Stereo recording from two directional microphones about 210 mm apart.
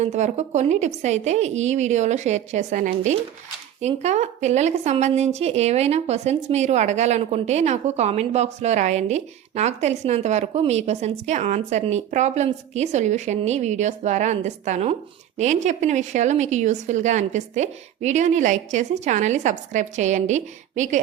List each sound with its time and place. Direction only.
0.0 s a woman's voice: 35° right (ahead or behind)